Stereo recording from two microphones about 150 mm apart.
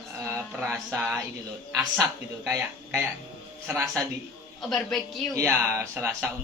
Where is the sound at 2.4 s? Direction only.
15° right (ahead or behind).